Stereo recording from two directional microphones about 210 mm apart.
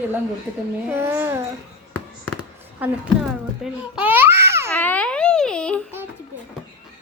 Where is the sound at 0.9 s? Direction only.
10° right (ahead or behind).